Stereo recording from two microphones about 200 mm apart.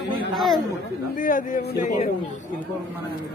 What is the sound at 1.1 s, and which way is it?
Speech, 40° left (ahead or behind).